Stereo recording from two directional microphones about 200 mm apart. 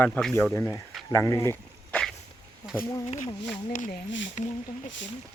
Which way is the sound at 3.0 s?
30° left (ahead or behind).